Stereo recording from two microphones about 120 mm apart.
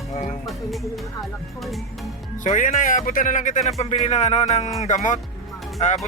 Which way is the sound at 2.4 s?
90° left.